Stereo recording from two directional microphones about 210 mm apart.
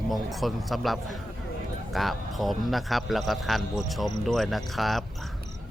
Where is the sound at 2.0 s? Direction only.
Centre (ahead or behind).